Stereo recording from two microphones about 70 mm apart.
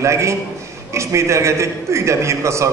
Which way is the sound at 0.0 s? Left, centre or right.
Right.